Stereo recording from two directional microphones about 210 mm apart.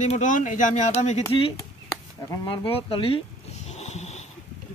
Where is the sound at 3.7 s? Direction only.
30° left (ahead or behind).